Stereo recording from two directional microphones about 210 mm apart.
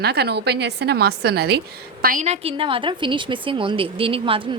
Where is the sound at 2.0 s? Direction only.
35° right (ahead or behind).